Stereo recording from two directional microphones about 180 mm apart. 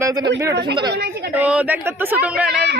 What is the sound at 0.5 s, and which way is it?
Speech, 65° right (ahead or behind).